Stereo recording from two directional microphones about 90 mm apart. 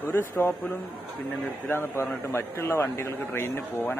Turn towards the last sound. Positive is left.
turn(degrees=20)  # may be behind; listen again after turning